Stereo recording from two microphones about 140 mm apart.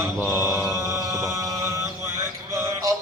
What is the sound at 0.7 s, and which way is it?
Music, 20° right (ahead or behind).